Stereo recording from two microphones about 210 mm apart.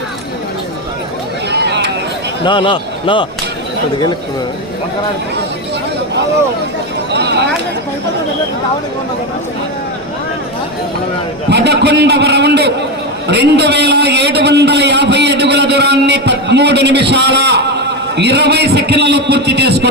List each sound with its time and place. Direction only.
1.5 s vehicle: 55° right (ahead or behind)
2.4 s speech: 25° left (ahead or behind)
7.1 s a sound: 55° right (ahead or behind)
11.4 s a man's voice: 55° right (ahead or behind)